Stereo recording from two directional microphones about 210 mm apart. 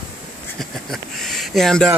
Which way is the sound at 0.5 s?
Centre (ahead or behind).